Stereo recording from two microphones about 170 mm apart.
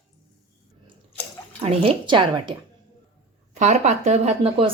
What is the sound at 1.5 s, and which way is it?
Speech, 35° right (ahead or behind).